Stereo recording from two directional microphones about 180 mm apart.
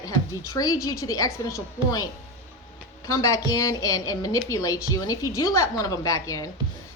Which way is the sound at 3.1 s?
15° left (ahead or behind).